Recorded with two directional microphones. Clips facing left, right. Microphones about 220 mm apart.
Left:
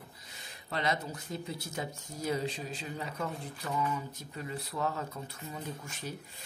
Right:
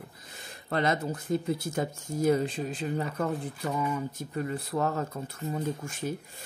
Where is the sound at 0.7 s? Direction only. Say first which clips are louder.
Right 6 dB; 50° right (ahead or behind).